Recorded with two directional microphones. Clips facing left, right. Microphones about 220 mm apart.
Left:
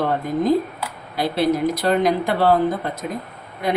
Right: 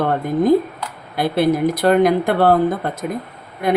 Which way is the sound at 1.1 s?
55° right (ahead or behind).